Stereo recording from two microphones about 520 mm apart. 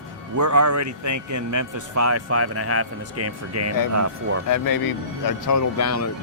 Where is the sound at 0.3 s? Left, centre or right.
Right.